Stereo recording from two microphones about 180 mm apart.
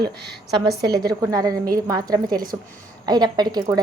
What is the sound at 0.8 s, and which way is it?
A woman's voice, 20° right (ahead or behind).